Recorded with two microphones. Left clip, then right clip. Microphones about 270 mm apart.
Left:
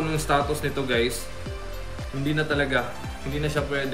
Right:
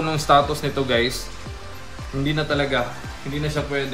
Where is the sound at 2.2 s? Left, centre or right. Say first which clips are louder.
Right 2 dB; centre.